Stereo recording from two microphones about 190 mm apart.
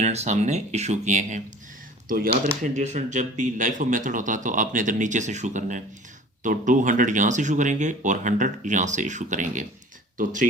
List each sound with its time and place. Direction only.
0.0 s speech: 35° right (ahead or behind)